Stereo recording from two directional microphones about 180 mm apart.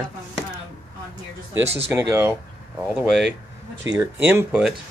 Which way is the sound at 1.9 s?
15° right (ahead or behind).